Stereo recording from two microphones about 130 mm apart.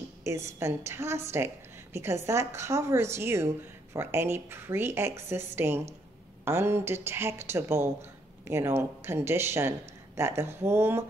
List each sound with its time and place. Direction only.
0.2 s speech: 20° right (ahead or behind)